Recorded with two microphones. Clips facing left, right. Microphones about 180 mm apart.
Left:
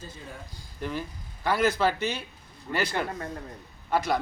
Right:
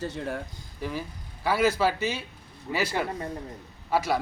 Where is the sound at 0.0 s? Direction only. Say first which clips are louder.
Right 11 dB; 75° right (ahead or behind).